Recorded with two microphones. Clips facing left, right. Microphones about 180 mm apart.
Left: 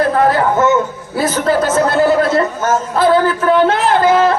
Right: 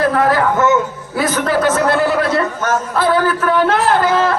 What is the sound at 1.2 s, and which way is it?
Speech, 25° left (ahead or behind).